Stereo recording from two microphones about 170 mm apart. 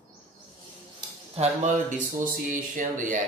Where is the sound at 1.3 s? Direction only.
45° right (ahead or behind).